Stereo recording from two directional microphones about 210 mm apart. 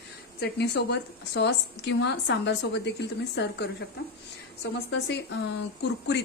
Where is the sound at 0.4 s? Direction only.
50° left (ahead or behind).